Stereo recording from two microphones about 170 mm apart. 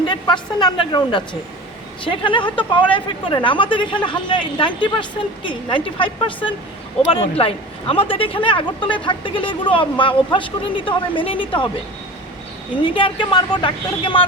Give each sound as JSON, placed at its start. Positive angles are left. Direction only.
{"t": 0.1, "sound": "a woman's voice", "side_deg": 25}
{"t": 12.8, "sound": "a woman's voice", "side_deg": 30}